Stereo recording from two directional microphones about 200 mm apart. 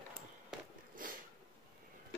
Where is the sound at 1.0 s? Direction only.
40° right (ahead or behind).